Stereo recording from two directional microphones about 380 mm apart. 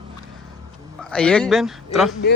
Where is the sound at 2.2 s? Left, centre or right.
Left.